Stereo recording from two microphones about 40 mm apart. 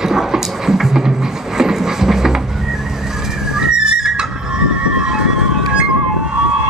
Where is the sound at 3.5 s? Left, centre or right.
Centre.